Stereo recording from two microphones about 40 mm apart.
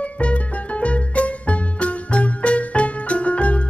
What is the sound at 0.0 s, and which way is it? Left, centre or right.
Music, left.